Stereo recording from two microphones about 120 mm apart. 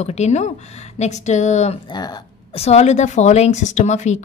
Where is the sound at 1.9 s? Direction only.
35° left (ahead or behind).